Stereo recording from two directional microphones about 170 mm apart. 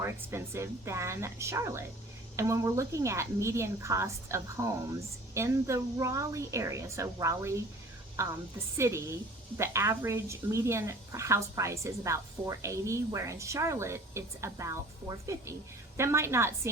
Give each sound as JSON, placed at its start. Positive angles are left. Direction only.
{"t": 0.0, "sound": "a woman's voice", "side_deg": -15}